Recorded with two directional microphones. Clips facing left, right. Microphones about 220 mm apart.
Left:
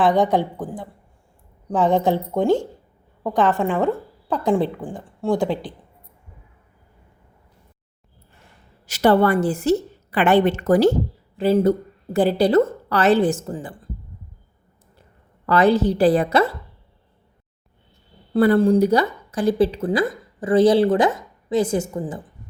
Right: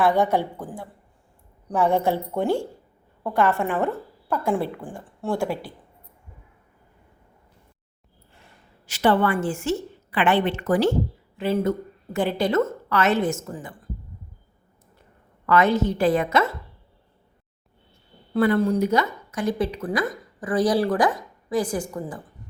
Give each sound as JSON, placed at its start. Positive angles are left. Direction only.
{"t": 0.0, "sound": "a woman's voice", "side_deg": 15}
{"t": 8.9, "sound": "a woman's voice", "side_deg": 40}
{"t": 15.4, "sound": "a woman's voice", "side_deg": 35}
{"t": 18.3, "sound": "speech", "side_deg": 35}